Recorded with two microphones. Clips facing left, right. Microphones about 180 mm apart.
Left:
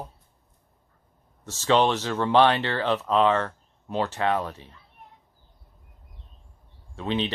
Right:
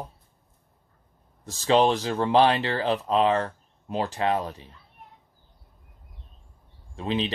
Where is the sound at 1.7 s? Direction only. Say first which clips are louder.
Right 1 dB; 35° right (ahead or behind).